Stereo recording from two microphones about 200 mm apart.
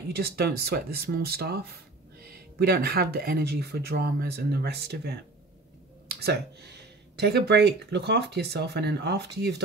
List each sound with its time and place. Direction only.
0.1 s speech: 55° right (ahead or behind)